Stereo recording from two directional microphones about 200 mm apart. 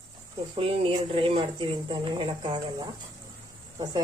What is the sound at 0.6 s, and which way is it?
Speech, 25° right (ahead or behind).